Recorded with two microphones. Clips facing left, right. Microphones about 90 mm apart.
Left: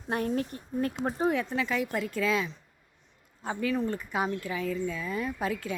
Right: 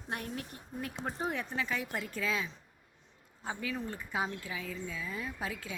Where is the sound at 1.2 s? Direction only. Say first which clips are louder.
Left 8 dB; 90° left.